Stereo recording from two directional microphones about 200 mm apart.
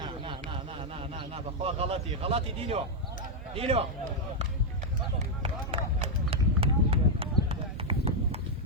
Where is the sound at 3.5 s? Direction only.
30° right (ahead or behind).